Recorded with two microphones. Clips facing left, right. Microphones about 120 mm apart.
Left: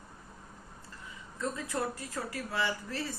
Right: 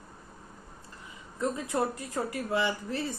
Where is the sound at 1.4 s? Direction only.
20° right (ahead or behind).